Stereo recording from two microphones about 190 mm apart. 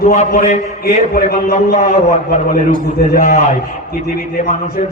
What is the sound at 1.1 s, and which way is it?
Speech, 50° left (ahead or behind).